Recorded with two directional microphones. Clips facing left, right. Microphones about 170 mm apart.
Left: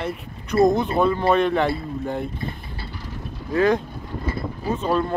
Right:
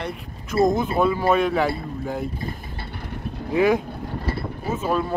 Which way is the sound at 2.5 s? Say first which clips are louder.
Right 1 dB; 55° right (ahead or behind).